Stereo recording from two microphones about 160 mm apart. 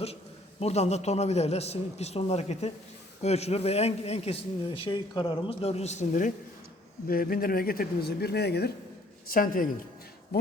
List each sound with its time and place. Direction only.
0.6 s a man's voice: 45° left (ahead or behind)
7.1 s speech: 65° left (ahead or behind); by 8.7 s 90° left
9.3 s a woman's voice: 60° left (ahead or behind)
10.3 s speech: 80° left